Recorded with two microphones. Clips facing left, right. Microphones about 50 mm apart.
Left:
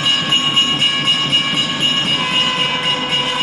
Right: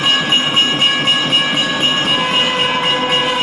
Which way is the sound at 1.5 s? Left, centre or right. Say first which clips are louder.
Right 2 dB; centre.